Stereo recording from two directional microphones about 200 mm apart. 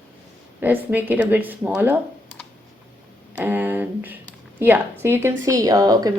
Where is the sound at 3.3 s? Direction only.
10° right (ahead or behind).